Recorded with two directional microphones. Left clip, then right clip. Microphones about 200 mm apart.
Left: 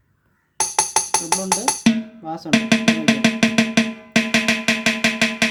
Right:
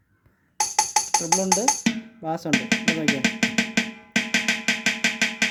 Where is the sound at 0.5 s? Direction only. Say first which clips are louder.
Left 2 dB; 55° left (ahead or behind).